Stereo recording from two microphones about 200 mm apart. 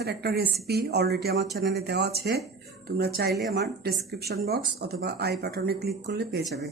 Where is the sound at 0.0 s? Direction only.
55° right (ahead or behind).